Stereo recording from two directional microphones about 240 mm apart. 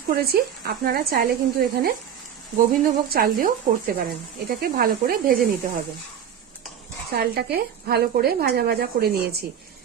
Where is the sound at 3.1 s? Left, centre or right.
Right.